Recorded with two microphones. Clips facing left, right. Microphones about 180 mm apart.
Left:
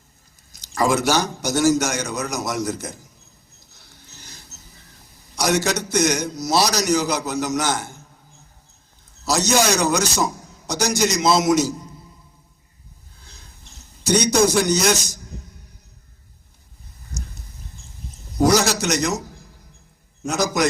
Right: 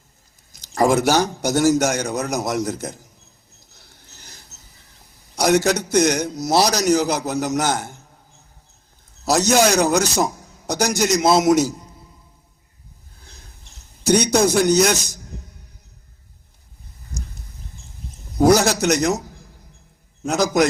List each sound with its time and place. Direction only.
0.5 s a man's voice: 55° right (ahead or behind)
5.3 s a man's voice: 55° right (ahead or behind)
9.2 s a man's voice: 55° right (ahead or behind)
14.0 s a man's voice: 55° right (ahead or behind)
18.4 s a sound: 55° right (ahead or behind)
20.2 s a man's voice: 55° right (ahead or behind)